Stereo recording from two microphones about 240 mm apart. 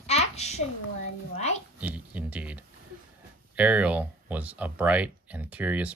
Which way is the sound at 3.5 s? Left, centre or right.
Centre.